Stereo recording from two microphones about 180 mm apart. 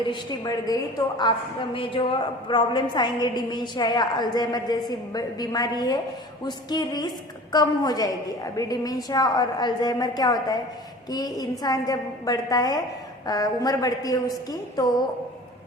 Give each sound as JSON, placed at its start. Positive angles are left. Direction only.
{"t": 0.1, "sound": "a woman's voice", "side_deg": 25}